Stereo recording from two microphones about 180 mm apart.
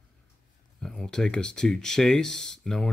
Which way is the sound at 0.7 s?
5° left (ahead or behind).